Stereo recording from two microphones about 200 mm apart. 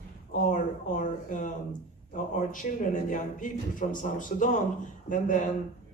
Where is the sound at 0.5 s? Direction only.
40° left (ahead or behind).